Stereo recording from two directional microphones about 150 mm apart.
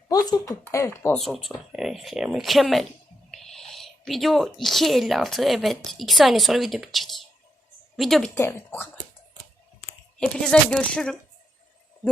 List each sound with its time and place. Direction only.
0.1 s speech: 25° left (ahead or behind)
1.1 s speech: centre (ahead or behind)
8.4 s speech: 15° left (ahead or behind)
10.2 s speech: 5° left (ahead or behind)